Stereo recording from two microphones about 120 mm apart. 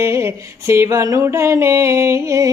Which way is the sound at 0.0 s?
20° right (ahead or behind).